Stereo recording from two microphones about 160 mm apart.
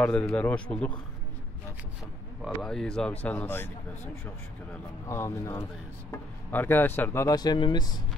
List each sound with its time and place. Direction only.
0.0 s speech: 5° left (ahead or behind)
2.4 s speech: 5° left (ahead or behind); by 8.0 s 25° left (ahead or behind)